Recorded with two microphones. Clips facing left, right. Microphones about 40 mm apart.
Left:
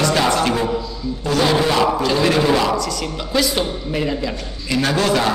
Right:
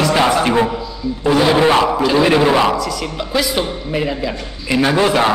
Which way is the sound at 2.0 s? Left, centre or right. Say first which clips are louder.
Right 4 dB; centre.